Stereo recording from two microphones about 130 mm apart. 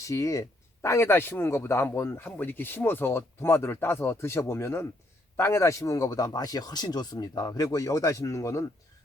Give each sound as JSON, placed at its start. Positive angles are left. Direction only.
{"t": 0.0, "sound": "speech", "side_deg": 25}